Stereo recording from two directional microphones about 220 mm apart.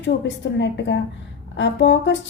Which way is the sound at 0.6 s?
55° left (ahead or behind).